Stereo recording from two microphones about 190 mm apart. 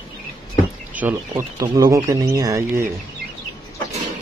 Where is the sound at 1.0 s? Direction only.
10° right (ahead or behind).